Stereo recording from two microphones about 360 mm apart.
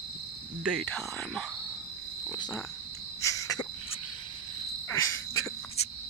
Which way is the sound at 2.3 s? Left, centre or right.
Centre.